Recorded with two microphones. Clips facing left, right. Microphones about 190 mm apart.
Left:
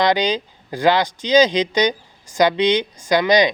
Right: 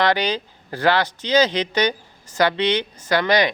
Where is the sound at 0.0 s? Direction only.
15° left (ahead or behind).